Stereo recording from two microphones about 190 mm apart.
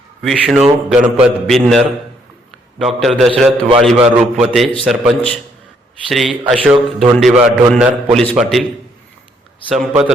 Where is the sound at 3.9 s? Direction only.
30° right (ahead or behind).